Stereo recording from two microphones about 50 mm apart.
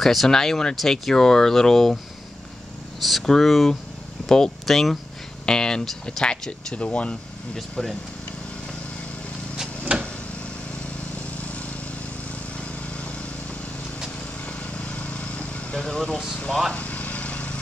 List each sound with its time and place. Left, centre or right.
0.0 s speech: centre
3.0 s speech: centre
6.2 s speech: left
7.5 s speech: centre
11.2 s lawn mower: left
15.0 s vehicle: left
16.7 s a sound: left